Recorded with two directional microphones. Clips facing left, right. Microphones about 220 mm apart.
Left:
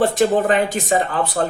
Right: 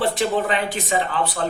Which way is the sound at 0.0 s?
45° left (ahead or behind).